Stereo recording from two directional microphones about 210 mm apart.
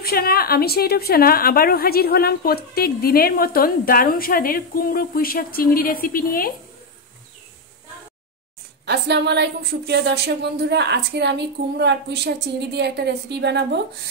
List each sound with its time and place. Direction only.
0.0 s a woman's voice: 45° left (ahead or behind)
8.8 s a woman's voice: 55° right (ahead or behind)